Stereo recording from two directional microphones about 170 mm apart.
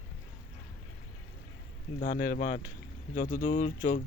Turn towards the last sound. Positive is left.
turn(degrees=45)  # may be behind; listen again after turning